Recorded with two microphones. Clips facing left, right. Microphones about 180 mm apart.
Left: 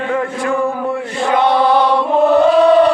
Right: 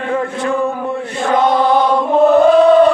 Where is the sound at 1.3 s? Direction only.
45° right (ahead or behind).